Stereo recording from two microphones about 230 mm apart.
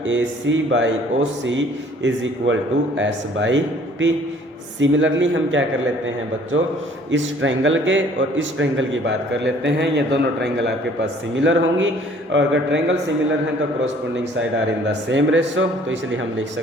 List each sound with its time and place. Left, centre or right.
0.1 s a man's voice: right
7.4 s a man's voice: right
15.1 s a man's voice: right